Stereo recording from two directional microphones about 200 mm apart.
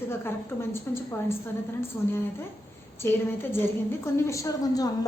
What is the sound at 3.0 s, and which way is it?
A woman's voice, 10° left (ahead or behind).